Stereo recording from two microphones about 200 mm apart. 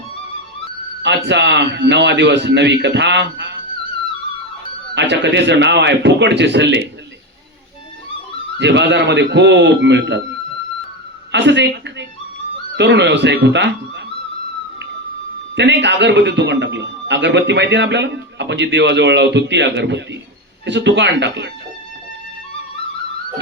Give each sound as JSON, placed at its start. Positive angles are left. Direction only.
{"t": 1.0, "sound": "a man's voice", "side_deg": -60}
{"t": 4.9, "sound": "a man's voice", "side_deg": -60}
{"t": 8.5, "sound": "a man's voice", "side_deg": -60}
{"t": 11.3, "sound": "a man's voice", "side_deg": -60}
{"t": 15.5, "sound": "a man's voice", "side_deg": -60}